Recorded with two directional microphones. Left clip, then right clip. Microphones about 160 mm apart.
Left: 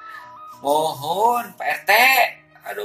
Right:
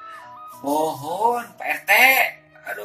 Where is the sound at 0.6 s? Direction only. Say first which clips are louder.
Left 3 dB; 30° left (ahead or behind).